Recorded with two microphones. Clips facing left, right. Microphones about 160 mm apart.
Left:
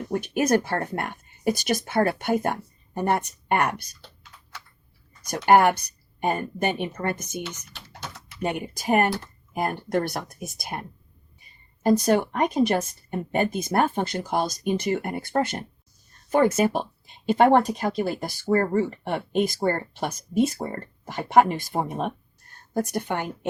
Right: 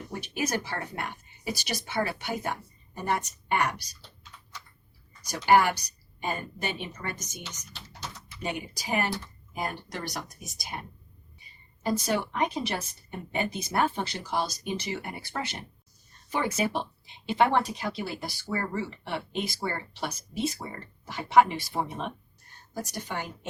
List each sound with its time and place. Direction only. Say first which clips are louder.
0.1 s a woman's voice: left 9 dB; 55° left (ahead or behind)
11.8 s a woman's voice: left 8 dB; 50° left (ahead or behind)